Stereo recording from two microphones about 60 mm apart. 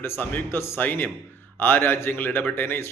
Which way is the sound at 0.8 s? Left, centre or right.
Left.